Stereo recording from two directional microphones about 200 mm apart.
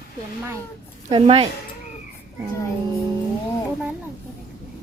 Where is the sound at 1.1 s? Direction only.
25° right (ahead or behind).